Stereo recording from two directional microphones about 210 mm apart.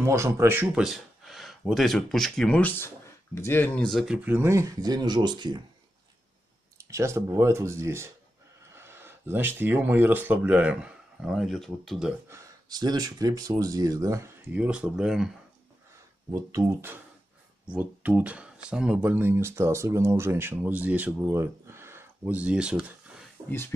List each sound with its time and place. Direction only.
0.0 s speech: 15° right (ahead or behind)
6.8 s speech: 15° right (ahead or behind)
12.3 s speech: 20° right (ahead or behind); by 15.3 s 5° right (ahead or behind)
16.3 s speech: 15° right (ahead or behind)